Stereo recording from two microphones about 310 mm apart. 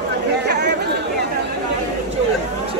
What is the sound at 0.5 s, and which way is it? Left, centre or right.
Chatter, right.